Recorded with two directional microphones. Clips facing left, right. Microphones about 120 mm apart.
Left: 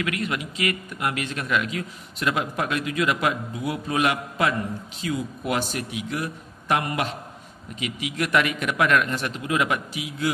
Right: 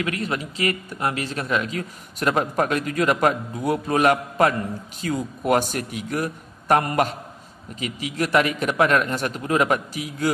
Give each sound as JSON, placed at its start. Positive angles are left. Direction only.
{"t": 0.0, "sound": "a man's voice", "side_deg": -35}